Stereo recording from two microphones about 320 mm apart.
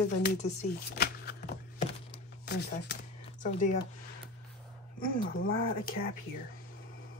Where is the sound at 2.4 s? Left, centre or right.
Left.